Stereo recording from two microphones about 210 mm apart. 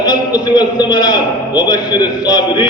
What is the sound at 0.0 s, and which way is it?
A man's voice, 20° left (ahead or behind).